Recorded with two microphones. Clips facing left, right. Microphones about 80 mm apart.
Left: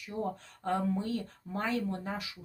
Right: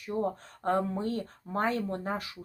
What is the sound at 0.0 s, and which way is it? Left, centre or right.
Speech, right.